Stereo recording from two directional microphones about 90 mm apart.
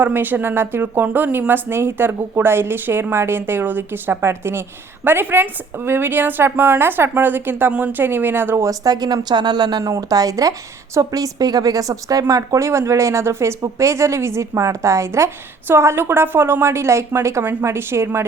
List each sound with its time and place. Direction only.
0.0 s speech: 20° right (ahead or behind)
8.6 s speech: 45° right (ahead or behind); by 18.3 s 30° right (ahead or behind)